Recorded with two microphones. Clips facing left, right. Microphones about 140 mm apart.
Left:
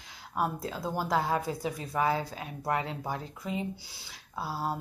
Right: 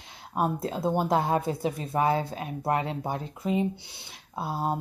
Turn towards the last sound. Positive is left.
turn(degrees=-20)  # may be behind; listen again after turning